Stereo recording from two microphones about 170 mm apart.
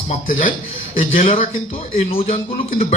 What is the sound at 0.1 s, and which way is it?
Speech, 50° left (ahead or behind).